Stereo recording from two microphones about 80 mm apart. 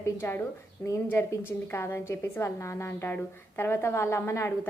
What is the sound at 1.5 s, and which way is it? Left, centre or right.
A woman's voice, left.